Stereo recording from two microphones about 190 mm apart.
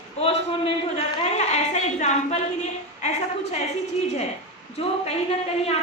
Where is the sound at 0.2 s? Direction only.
30° left (ahead or behind).